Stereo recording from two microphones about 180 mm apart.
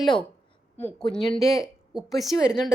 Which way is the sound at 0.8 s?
5° left (ahead or behind).